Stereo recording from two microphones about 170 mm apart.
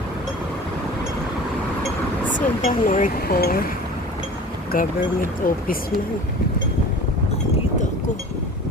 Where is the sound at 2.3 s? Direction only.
50° left (ahead or behind).